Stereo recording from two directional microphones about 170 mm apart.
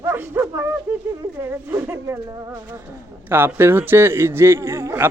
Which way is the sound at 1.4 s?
15° right (ahead or behind).